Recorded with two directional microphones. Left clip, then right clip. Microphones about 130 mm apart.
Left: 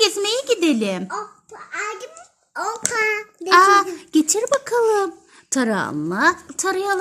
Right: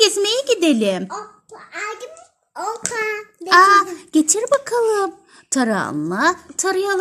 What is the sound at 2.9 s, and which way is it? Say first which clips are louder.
Speech: left 4 dB; 60° left (ahead or behind).